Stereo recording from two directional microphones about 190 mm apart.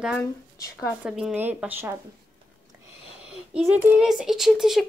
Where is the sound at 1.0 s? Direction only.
5° right (ahead or behind).